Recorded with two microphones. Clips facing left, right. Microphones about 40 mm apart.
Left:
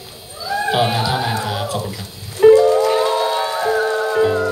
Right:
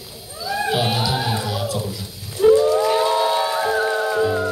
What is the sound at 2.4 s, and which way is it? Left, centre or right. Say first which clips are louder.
Whale vocalization: left 5 dB; left.